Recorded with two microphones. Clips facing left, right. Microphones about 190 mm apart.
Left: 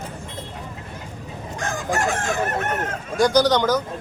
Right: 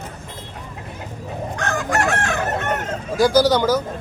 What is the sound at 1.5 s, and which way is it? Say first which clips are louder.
Chicken: right 2 dB; 70° right (ahead or behind).